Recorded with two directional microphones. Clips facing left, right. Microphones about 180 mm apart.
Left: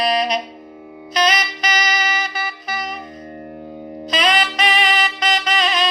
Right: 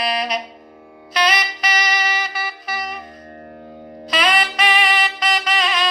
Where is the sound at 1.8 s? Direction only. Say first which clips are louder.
Even; 30° right (ahead or behind).